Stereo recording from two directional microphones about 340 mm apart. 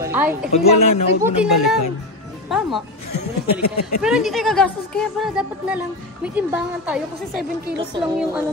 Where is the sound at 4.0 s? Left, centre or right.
Centre.